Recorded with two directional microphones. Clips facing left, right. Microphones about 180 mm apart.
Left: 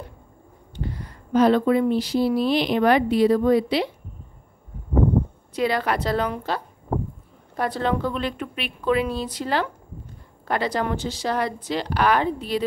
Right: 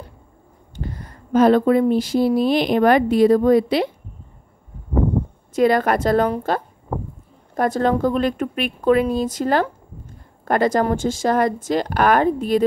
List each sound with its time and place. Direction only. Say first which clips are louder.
0.7 s speech: even; 45° right (ahead or behind)
5.5 s speech: right 7 dB; 50° right (ahead or behind)